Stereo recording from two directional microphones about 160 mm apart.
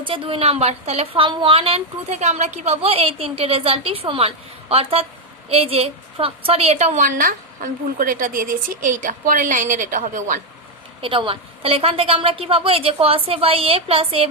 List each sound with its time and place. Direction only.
0.0 s a woman's voice: 35° right (ahead or behind); by 10.4 s 55° right (ahead or behind)
11.0 s a woman's voice: 35° right (ahead or behind)